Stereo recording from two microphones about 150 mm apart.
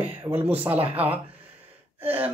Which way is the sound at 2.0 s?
10° right (ahead or behind).